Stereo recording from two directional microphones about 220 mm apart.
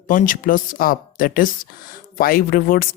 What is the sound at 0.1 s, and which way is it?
Speech, 40° left (ahead or behind).